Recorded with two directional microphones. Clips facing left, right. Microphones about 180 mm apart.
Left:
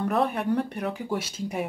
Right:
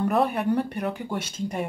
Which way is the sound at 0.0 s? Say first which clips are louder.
Right 2 dB; centre (ahead or behind).